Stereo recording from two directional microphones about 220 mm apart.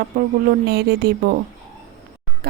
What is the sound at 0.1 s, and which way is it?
Speech, 45° right (ahead or behind).